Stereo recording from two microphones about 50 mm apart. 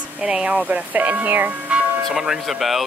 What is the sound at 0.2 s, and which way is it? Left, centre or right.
Speech, centre.